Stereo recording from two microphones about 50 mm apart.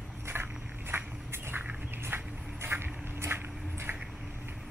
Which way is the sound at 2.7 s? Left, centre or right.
Right.